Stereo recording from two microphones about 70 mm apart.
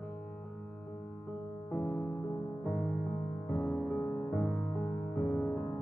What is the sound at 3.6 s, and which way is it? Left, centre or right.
Music, left.